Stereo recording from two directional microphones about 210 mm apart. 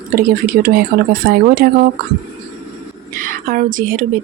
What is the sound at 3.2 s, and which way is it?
Speech, 40° right (ahead or behind).